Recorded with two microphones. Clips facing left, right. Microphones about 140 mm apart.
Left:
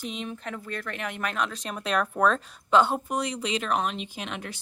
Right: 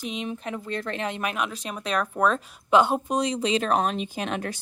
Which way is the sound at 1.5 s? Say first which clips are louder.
Even; 5° right (ahead or behind).